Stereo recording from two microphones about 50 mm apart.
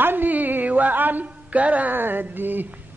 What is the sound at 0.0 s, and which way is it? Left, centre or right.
Music, right.